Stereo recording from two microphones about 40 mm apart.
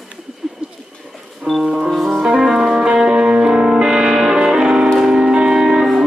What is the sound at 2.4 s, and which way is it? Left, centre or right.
Music, centre.